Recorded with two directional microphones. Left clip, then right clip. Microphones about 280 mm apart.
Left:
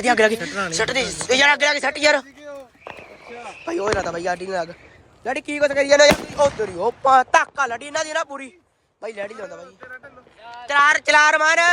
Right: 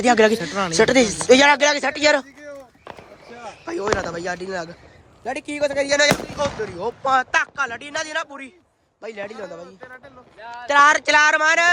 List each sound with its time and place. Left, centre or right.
0.0 s speech: centre
3.9 s speech: centre
10.7 s speech: centre